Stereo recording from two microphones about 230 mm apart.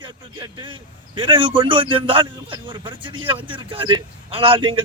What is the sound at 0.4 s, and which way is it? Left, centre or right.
A man's voice, right.